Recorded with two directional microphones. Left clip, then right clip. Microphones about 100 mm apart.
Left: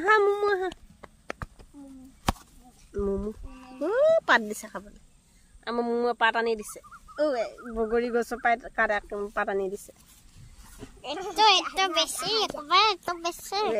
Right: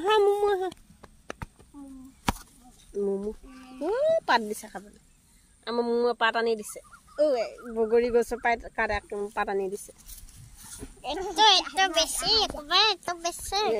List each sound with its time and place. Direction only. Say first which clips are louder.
0.2 s a sound: right 1 dB; 35° left (ahead or behind)
2.3 s chop: even; 25° left (ahead or behind)
2.9 s a sound: right 1 dB; 30° left (ahead or behind)
3.4 s cat: left 1 dB; 20° left (ahead or behind)
3.9 s music: left 3 dB; 35° left (ahead or behind)
4.5 s a woman's voice: even; 30° left (ahead or behind)
6.1 s speech: left 1 dB; 15° left (ahead or behind); by 9.7 s 30° left (ahead or behind)
11.0 s speech: right 1 dB; 20° left (ahead or behind)